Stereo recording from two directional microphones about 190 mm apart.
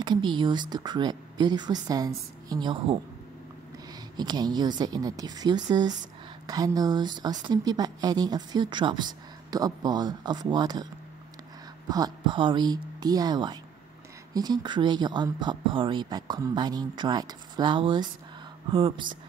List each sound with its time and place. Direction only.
0.0 s a woman's voice: 25° right (ahead or behind)
4.2 s a woman's voice: 20° right (ahead or behind)
11.9 s a woman's voice: 25° right (ahead or behind)